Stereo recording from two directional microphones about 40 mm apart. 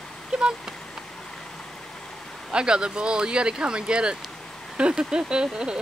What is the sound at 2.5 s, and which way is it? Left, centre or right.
Speech, right.